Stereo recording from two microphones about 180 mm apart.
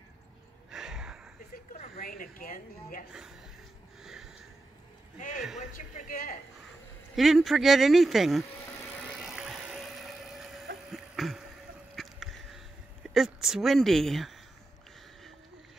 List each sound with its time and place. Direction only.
0.7 s gasp: 5° right (ahead or behind)
1.5 s a sound: 50° left (ahead or behind)
3.1 s speech: 5° right (ahead or behind)
4.0 s a sound: centre (ahead or behind)
5.4 s speech: centre (ahead or behind)
5.7 s speech: 45° left (ahead or behind)
7.2 s speech: centre (ahead or behind)
8.9 s vehicle: centre (ahead or behind)
10.9 s a sound: centre (ahead or behind)
11.9 s duck: centre (ahead or behind)
13.1 s speech: centre (ahead or behind)